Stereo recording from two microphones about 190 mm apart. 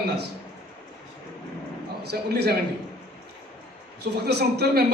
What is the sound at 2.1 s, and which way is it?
Speech, 60° right (ahead or behind).